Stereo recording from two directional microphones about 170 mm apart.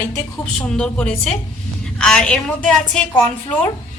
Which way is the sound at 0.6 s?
5° left (ahead or behind).